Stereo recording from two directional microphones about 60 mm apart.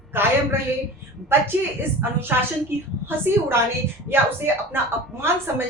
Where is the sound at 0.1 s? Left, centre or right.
Right.